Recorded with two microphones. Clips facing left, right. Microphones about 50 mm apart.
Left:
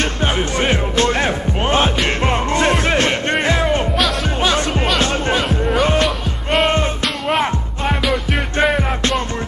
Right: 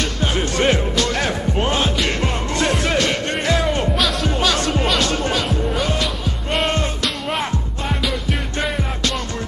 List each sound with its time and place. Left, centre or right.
0.0 s music: left
0.4 s music: centre
0.9 s music: left
6.0 s music: centre
6.7 s music: left
7.2 s music: centre